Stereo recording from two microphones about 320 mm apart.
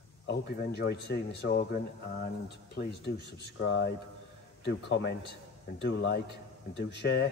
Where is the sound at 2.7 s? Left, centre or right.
Left.